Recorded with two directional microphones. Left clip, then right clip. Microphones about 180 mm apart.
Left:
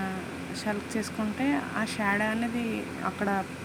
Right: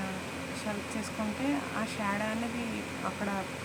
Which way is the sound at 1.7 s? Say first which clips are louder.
Left 5 dB; 25° left (ahead or behind).